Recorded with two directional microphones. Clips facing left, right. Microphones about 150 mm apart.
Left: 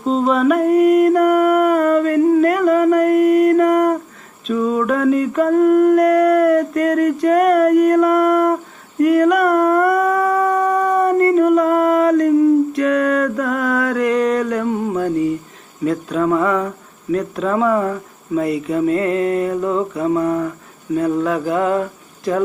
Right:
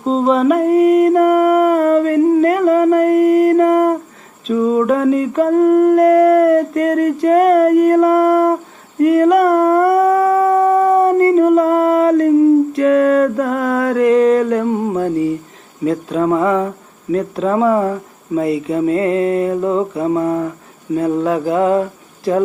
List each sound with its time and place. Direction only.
0.0 s singing: 30° right (ahead or behind)
9.0 s humming: 25° right (ahead or behind)
15.8 s speech: 25° right (ahead or behind)